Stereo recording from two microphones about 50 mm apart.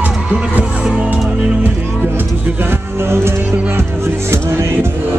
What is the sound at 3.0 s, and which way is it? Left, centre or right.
Music, right.